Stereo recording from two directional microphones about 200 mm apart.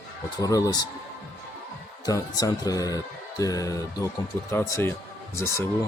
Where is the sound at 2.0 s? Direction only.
20° left (ahead or behind).